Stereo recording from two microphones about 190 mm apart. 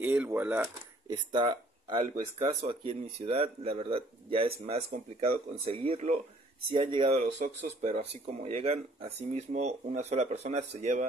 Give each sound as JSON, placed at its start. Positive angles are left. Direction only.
{"t": 0.0, "sound": "speech", "side_deg": -10}